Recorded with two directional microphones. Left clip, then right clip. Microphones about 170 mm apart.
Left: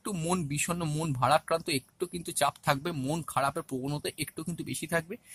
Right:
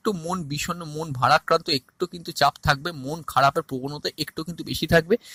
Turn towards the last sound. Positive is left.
turn(degrees=-40)  # may be behind; listen again after turning